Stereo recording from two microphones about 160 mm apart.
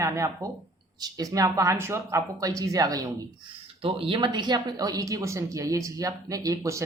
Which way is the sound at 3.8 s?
35° right (ahead or behind).